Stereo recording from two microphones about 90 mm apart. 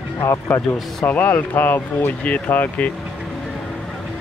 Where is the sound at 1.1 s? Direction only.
20° left (ahead or behind).